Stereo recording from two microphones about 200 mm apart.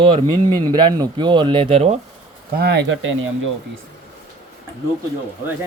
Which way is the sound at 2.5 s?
55° right (ahead or behind).